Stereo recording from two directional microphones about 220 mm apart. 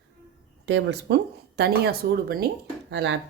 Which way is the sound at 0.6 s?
50° right (ahead or behind).